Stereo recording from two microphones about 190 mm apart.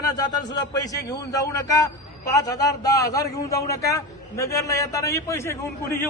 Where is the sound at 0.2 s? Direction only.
20° left (ahead or behind).